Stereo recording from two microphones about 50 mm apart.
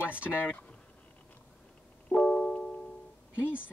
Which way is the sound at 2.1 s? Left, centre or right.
Centre.